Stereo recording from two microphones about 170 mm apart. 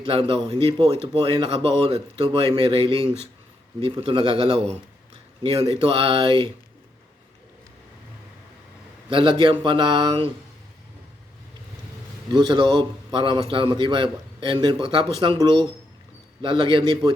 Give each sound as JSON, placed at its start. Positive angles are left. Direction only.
{"t": 0.0, "sound": "a man's voice", "side_deg": -30}
{"t": 9.1, "sound": "a man's voice", "side_deg": -30}
{"t": 12.3, "sound": "a man's voice", "side_deg": -25}